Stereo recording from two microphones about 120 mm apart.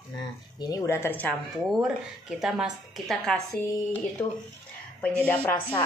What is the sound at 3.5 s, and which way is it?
Speech, 15° left (ahead or behind).